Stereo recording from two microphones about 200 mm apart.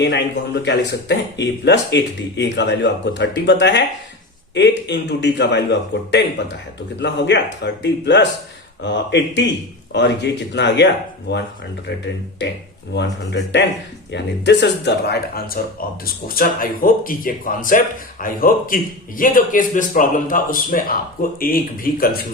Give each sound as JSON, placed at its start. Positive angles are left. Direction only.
{"t": 0.0, "sound": "speech", "side_deg": 60}
{"t": 12.9, "sound": "speech", "side_deg": 60}